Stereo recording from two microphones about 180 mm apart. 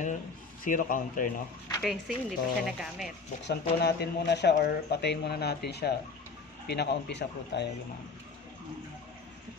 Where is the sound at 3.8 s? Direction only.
65° left (ahead or behind).